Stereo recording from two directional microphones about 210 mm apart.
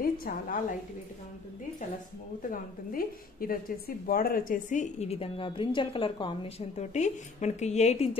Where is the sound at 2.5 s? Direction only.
40° left (ahead or behind).